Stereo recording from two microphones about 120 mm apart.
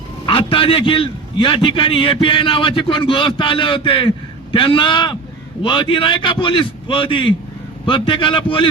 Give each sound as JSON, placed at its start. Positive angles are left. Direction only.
{"t": 0.3, "sound": "a man's voice", "side_deg": 45}